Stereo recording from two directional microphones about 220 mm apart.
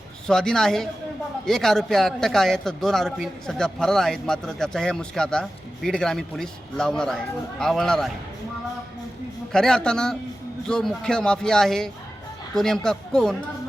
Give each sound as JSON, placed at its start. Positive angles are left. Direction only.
{"t": 0.3, "sound": "a man's voice", "side_deg": 0}
{"t": 9.5, "sound": "a man's voice", "side_deg": 5}